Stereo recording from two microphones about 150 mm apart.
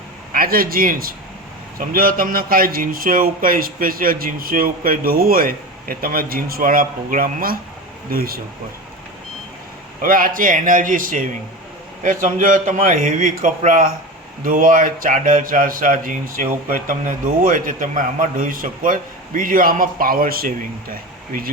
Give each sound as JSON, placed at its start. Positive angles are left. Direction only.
{"t": 0.3, "sound": "speech", "side_deg": -80}
{"t": 10.0, "sound": "a man's voice", "side_deg": -70}